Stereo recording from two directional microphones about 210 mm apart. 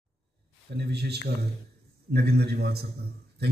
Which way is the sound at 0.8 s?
50° right (ahead or behind).